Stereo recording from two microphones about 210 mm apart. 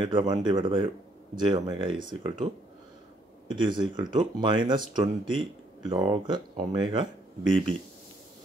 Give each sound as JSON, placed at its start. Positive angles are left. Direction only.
{"t": 0.0, "sound": "speech", "side_deg": -25}